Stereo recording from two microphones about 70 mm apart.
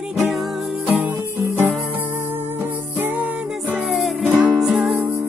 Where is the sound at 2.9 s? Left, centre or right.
Right.